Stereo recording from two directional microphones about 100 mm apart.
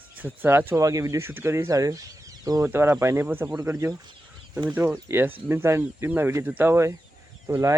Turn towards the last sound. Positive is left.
turn(degrees=-30)  # may be behind; listen again after turning